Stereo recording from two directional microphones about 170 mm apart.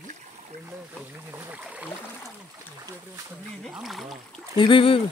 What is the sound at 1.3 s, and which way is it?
Speech, 10° right (ahead or behind).